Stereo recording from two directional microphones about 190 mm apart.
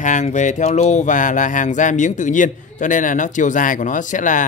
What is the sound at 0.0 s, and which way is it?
Speech, 40° left (ahead or behind).